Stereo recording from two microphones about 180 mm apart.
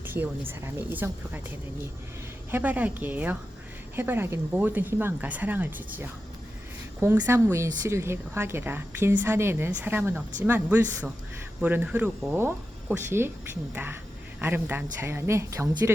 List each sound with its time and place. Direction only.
0.0 s speech: 10° right (ahead or behind)